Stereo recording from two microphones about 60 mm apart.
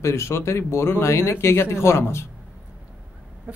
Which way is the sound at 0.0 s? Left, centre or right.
Left.